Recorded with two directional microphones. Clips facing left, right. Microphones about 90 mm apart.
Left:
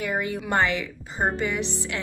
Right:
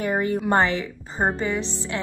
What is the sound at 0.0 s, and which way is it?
A woman's voice, 35° right (ahead or behind).